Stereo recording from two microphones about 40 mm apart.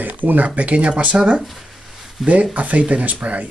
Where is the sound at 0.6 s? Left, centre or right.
Right.